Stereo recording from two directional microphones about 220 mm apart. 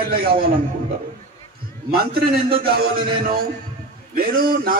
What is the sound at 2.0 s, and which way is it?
A man's voice, 45° right (ahead or behind).